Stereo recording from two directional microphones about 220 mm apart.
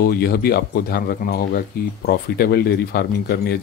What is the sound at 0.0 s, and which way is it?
Speech, 45° left (ahead or behind).